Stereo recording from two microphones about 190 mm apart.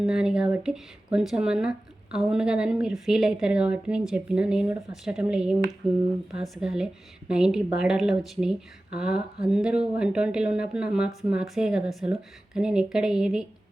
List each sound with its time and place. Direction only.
0.0 s a woman's voice: 5° right (ahead or behind)